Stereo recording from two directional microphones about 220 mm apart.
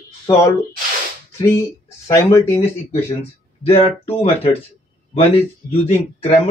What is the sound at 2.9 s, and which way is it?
Speech, 25° left (ahead or behind).